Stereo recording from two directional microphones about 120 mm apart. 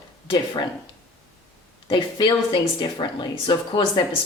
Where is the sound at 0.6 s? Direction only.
40° left (ahead or behind).